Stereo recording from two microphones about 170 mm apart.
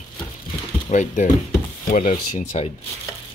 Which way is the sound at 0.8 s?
45° left (ahead or behind).